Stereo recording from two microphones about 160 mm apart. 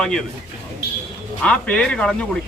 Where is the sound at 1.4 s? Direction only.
5° left (ahead or behind).